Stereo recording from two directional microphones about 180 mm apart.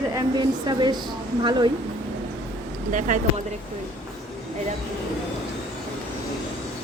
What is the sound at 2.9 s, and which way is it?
Speech, 45° right (ahead or behind).